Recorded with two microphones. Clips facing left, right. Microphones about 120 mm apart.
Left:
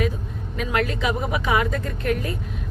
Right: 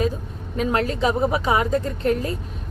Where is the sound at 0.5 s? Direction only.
30° right (ahead or behind).